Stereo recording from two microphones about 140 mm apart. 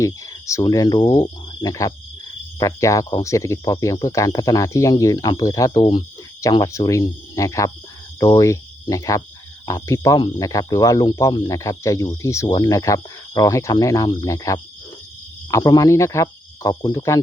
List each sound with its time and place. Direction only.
0.0 s speech: 20° left (ahead or behind)